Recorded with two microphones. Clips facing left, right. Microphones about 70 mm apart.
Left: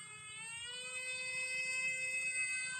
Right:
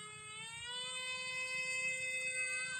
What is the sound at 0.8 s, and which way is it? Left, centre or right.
Emergency vehicle, right.